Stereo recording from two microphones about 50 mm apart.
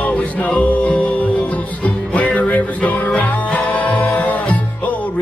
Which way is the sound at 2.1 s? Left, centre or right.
Left.